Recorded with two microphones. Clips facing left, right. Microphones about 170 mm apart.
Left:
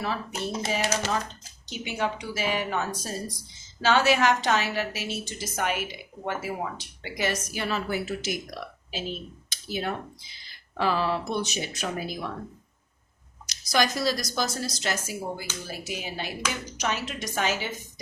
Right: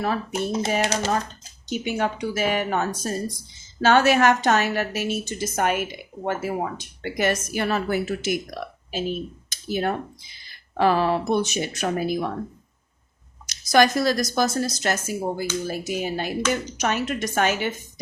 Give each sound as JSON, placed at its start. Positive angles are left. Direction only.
{"t": 0.0, "sound": "a woman's voice", "side_deg": -50}
{"t": 0.9, "sound": "speech", "side_deg": -40}
{"t": 1.7, "sound": "a woman's voice", "side_deg": -50}
{"t": 13.5, "sound": "a woman's voice", "side_deg": -50}